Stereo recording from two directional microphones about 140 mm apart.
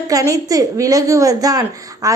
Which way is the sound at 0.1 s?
25° right (ahead or behind).